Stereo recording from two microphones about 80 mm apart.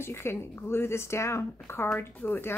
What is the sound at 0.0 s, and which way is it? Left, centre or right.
Speech, left.